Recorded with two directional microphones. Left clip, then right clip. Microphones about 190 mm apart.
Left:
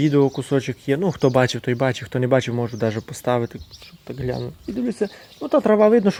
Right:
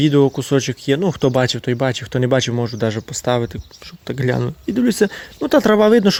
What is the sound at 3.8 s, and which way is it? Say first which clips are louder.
Speech: right 7 dB; 30° right (ahead or behind).